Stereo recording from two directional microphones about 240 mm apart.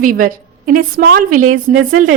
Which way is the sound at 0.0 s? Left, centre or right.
Right.